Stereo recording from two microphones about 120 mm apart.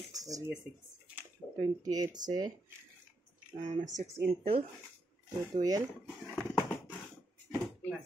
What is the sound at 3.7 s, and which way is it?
Speech, 90° right.